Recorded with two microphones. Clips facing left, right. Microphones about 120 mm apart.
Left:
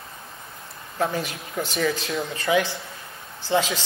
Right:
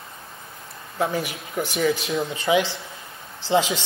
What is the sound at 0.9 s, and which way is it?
A woman's voice, 10° right (ahead or behind).